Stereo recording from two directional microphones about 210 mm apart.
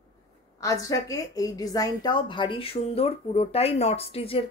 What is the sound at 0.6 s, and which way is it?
A woman's voice, 15° left (ahead or behind).